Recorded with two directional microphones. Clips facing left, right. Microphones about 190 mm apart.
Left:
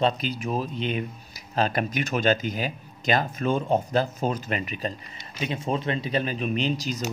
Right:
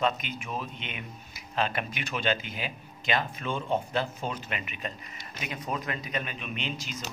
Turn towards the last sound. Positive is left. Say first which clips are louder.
# left 9 dB
turn(degrees=40)  # may be behind; listen again after turning